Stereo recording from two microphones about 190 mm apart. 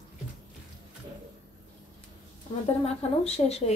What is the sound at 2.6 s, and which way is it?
Speech, 35° left (ahead or behind).